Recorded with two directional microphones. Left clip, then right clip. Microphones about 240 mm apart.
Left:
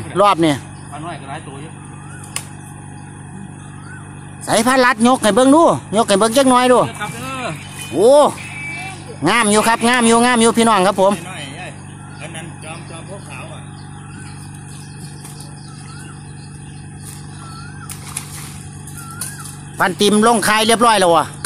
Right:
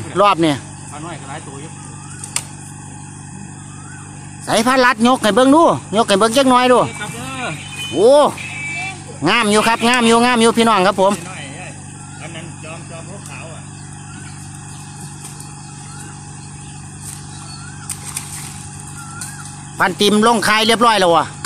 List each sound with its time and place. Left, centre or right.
0.1 s speech: centre
4.5 s speech: centre
19.8 s speech: centre